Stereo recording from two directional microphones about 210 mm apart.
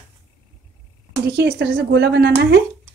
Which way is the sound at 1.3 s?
55° right (ahead or behind).